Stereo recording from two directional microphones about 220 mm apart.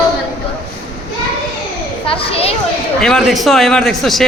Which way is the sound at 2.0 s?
25° left (ahead or behind).